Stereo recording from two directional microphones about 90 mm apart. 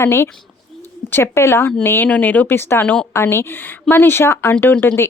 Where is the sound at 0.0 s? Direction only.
30° left (ahead or behind).